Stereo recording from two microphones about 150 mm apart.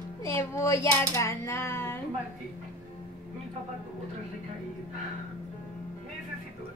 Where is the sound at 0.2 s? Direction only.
20° left (ahead or behind).